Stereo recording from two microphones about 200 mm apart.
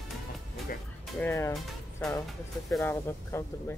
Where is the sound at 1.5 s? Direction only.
Centre (ahead or behind).